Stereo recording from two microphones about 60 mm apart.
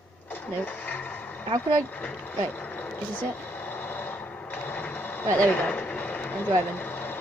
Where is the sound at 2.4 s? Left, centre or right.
Left.